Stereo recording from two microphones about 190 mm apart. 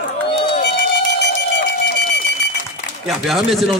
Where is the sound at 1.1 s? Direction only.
65° left (ahead or behind).